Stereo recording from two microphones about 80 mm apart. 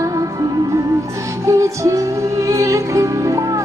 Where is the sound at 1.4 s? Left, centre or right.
Right.